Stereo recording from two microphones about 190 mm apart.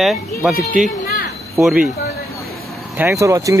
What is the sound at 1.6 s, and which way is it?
Speech, 5° right (ahead or behind).